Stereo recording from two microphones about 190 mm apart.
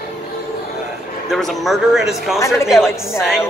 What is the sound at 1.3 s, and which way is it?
Speech, centre (ahead or behind).